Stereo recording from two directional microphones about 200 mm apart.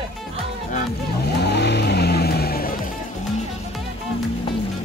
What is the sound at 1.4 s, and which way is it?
Vehicle, 55° left (ahead or behind).